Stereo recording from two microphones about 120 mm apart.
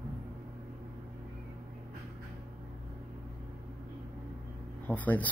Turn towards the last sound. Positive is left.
turn(degrees=15)  # may be behind; listen again after turning